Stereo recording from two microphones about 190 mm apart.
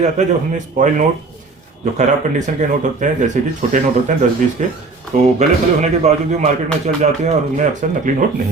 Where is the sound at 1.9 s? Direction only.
40° right (ahead or behind).